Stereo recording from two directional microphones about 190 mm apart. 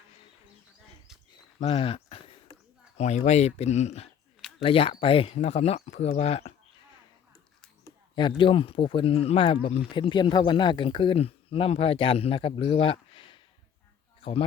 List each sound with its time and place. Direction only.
1.6 s a sound: 30° left (ahead or behind)
3.0 s speech: 35° left (ahead or behind)
8.4 s speech: 25° left (ahead or behind)